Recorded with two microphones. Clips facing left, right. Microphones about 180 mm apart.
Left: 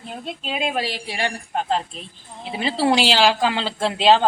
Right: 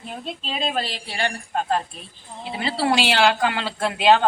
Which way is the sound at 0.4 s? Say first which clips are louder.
Left 2 dB; 10° left (ahead or behind).